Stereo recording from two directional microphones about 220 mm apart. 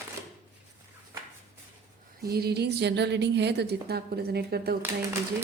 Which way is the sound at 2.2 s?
45° right (ahead or behind).